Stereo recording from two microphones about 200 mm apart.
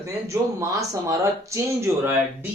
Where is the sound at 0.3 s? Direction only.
15° right (ahead or behind).